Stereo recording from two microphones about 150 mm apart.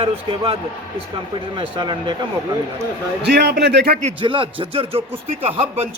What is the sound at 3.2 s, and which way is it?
Speech, 90° right.